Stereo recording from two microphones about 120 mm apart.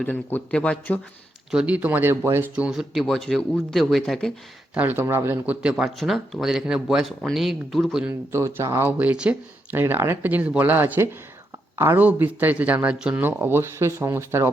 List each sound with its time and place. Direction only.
0.0 s a man's voice: 15° left (ahead or behind)
1.5 s speech: 10° right (ahead or behind)
2.6 s speech: 5° right (ahead or behind)
4.7 s speech: 15° right (ahead or behind)
5.7 s speech: centre (ahead or behind)
8.3 s speech: 20° right (ahead or behind)
9.8 s speech: 20° right (ahead or behind)